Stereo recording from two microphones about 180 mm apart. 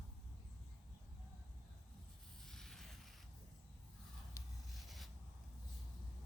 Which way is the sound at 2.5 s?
Centre (ahead or behind).